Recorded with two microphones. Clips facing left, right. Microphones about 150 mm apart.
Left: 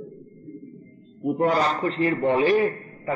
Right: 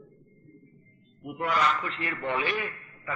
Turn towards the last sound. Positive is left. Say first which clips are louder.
# left 12 dB
turn(degrees=35)  # may be behind; listen again after turning